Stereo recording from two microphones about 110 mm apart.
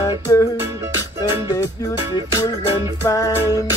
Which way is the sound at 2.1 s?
35° left (ahead or behind).